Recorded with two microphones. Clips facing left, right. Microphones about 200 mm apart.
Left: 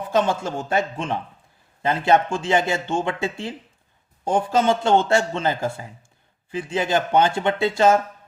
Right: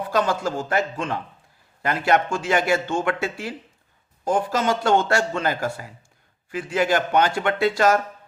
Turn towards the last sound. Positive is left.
turn(degrees=25)  # may be behind; listen again after turning